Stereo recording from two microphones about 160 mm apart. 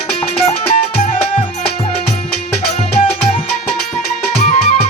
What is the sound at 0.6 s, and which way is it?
Music, 40° left (ahead or behind).